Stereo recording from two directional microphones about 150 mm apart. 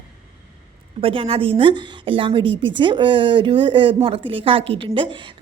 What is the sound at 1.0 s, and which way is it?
A woman's voice, 40° right (ahead or behind).